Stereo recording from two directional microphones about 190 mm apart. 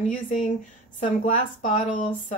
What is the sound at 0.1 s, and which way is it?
A woman's voice, 40° left (ahead or behind).